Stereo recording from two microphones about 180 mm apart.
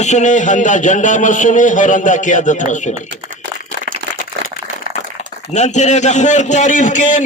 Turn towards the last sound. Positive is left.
turn(degrees=45)  # may be behind; listen again after turning